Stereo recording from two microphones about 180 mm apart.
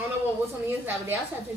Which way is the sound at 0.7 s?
10° right (ahead or behind).